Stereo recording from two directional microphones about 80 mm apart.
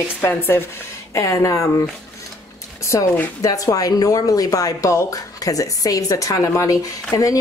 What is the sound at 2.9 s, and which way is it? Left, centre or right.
Speech, left.